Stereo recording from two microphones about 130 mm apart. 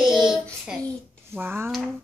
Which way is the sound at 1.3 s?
15° right (ahead or behind).